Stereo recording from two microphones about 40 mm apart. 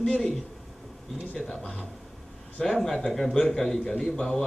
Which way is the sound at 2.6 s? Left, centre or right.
Centre.